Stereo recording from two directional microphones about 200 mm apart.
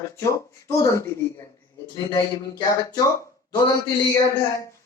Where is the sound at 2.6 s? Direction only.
20° left (ahead or behind).